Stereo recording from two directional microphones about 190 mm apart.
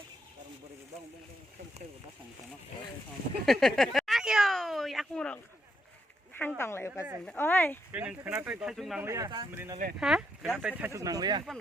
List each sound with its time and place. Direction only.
3.4 s a sound: centre (ahead or behind)
6.6 s speech: 15° left (ahead or behind)
7.9 s speech: 10° right (ahead or behind)
9.0 s speech: 15° right (ahead or behind)
10.0 s speech: centre (ahead or behind); by 11.4 s 20° right (ahead or behind)